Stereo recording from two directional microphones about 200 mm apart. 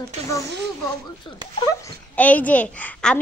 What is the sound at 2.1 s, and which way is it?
A child's voice, 5° left (ahead or behind).